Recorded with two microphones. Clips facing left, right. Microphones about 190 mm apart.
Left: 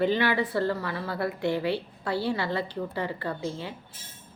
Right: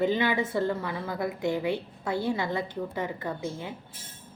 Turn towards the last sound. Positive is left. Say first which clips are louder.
# left 1 dB
turn(degrees=-20)  # may be behind; listen again after turning